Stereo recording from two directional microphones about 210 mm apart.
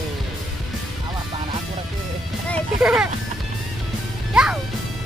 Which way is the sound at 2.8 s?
5° right (ahead or behind).